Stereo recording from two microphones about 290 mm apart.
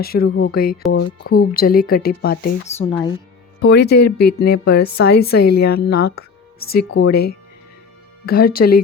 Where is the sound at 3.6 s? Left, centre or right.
Left.